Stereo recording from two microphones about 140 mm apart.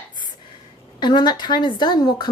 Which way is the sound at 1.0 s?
30° left (ahead or behind).